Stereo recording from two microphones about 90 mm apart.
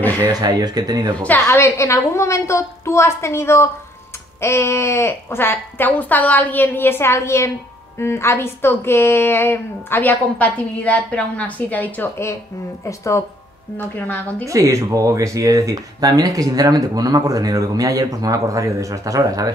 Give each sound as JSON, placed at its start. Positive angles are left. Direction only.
{"t": 0.2, "sound": "speech", "side_deg": -45}
{"t": 1.2, "sound": "a woman's voice", "side_deg": 20}
{"t": 12.8, "sound": "a woman's voice", "side_deg": 35}
{"t": 13.7, "sound": "a woman's voice", "side_deg": 20}
{"t": 14.4, "sound": "speech", "side_deg": -35}